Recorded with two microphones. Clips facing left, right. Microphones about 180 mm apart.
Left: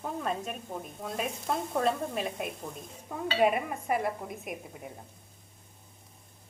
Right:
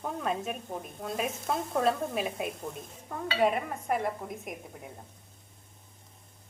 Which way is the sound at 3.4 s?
10° left (ahead or behind).